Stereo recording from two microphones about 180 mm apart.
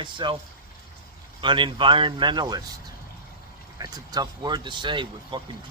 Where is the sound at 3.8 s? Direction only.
20° right (ahead or behind).